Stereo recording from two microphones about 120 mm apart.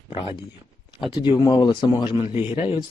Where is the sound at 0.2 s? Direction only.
45° left (ahead or behind).